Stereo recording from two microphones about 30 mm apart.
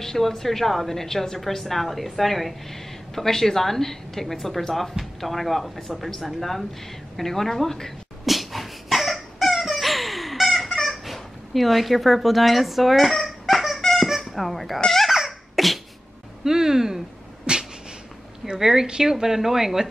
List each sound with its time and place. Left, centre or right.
0.0 s a woman's voice: centre
8.3 s dog: centre
10.8 s a sound: centre
14.2 s speech: centre
15.0 s baby laughter: centre
16.4 s speech: centre
17.5 s cat: right
18.6 s speech: centre